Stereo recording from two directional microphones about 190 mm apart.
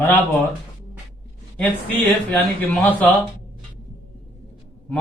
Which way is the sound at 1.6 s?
10° left (ahead or behind).